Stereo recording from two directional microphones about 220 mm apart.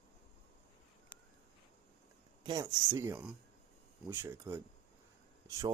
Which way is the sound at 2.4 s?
20° right (ahead or behind).